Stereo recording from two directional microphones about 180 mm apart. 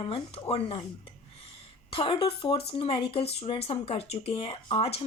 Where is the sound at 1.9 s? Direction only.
30° left (ahead or behind).